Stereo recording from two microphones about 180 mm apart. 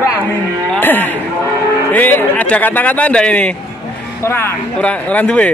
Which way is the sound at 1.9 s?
10° left (ahead or behind).